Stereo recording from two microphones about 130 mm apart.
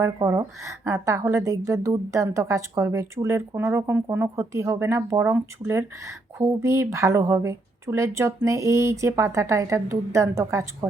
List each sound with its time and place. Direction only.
0.0 s a woman's voice: 25° right (ahead or behind)